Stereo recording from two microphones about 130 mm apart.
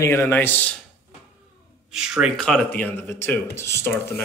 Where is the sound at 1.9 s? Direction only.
5° right (ahead or behind).